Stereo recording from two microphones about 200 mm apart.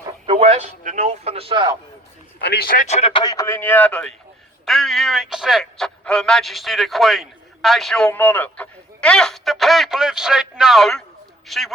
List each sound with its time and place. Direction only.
0.3 s a man's voice: 30° right (ahead or behind)
2.4 s speech: 55° left (ahead or behind)
2.8 s a man's voice: 30° left (ahead or behind); by 11.7 s centre (ahead or behind)